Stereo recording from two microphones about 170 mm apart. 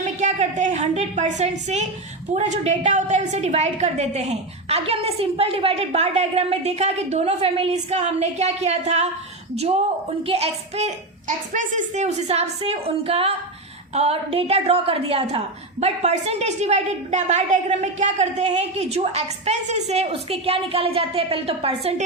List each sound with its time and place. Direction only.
0.0 s a woman's voice: 45° right (ahead or behind)
10.2 s a woman's voice: 35° right (ahead or behind)